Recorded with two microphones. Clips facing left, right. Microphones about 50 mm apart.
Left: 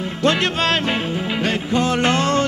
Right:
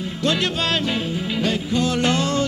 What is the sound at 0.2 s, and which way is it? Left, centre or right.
Music, left.